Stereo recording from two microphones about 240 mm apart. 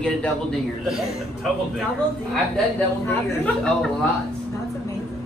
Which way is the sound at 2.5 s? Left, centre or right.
Centre.